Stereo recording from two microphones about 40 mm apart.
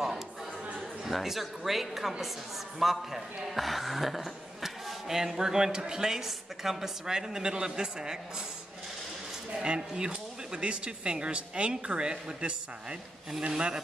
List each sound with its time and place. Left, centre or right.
0.7 s a woman's voice: centre
9.5 s speech: right
13.5 s speech: right